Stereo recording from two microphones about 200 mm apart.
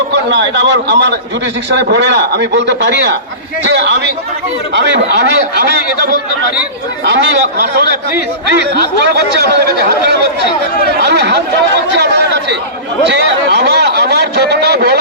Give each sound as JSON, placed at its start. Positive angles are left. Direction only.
{"t": 0.1, "sound": "speech", "side_deg": -60}
{"t": 7.0, "sound": "speech", "side_deg": -60}
{"t": 8.4, "sound": "a man's voice", "side_deg": -60}